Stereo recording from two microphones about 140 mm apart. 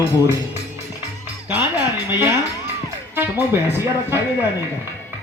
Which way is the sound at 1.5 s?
15° right (ahead or behind).